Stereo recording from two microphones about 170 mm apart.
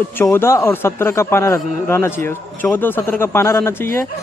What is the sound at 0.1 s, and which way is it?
A man's voice, 15° left (ahead or behind).